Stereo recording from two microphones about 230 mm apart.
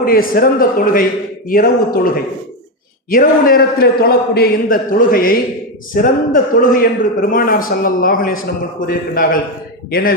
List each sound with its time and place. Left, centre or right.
0.0 s a man's voice: left